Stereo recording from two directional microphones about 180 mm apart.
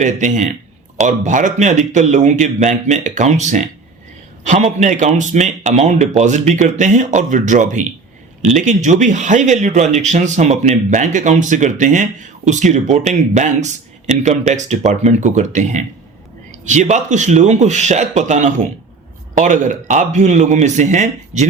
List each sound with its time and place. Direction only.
0.0 s speech: 40° right (ahead or behind)